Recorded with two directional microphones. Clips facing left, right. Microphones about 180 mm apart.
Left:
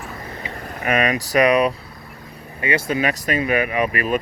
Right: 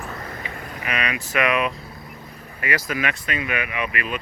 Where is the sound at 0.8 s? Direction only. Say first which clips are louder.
Left 8 dB; 45° left (ahead or behind).